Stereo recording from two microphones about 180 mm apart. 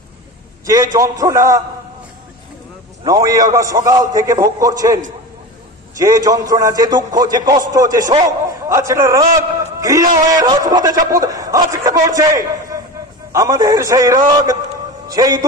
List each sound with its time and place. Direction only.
0.9 s a man's voice: 20° right (ahead or behind)
3.0 s a man's voice: 20° right (ahead or behind)